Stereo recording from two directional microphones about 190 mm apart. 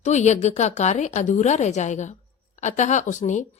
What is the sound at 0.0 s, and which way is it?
A woman's voice, 40° left (ahead or behind).